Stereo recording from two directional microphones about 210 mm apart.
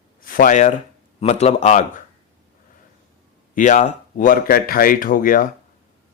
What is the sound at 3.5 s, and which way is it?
Speech, 35° left (ahead or behind).